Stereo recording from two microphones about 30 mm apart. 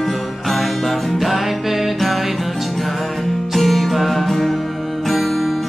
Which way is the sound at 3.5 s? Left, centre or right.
Centre.